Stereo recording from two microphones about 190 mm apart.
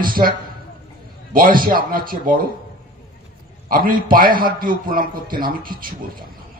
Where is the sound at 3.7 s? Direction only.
50° right (ahead or behind).